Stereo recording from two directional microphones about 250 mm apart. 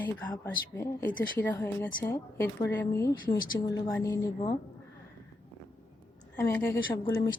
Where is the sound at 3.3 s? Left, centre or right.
Left.